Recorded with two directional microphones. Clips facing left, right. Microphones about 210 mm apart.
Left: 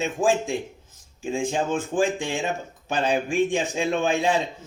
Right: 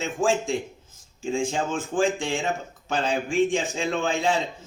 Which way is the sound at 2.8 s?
15° left (ahead or behind).